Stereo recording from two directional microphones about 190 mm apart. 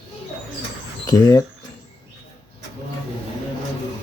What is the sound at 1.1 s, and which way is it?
Speech, 15° left (ahead or behind).